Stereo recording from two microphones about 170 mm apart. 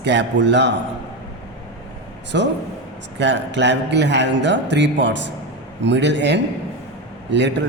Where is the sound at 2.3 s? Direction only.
90° right.